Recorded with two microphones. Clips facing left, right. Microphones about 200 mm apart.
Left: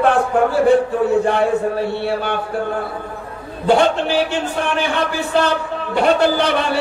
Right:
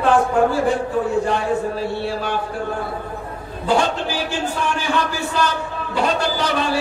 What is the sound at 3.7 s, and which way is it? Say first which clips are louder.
Speech: left 5 dB; 65° left (ahead or behind).